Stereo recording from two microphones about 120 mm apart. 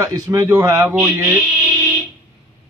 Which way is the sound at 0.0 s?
25° right (ahead or behind).